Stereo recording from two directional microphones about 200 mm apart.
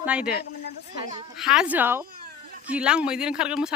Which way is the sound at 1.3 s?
Centre (ahead or behind).